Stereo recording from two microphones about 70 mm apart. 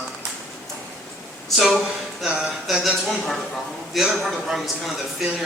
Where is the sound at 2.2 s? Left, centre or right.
Centre.